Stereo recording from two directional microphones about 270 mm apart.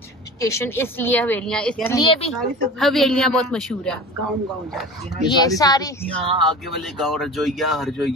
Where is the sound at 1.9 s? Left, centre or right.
Left.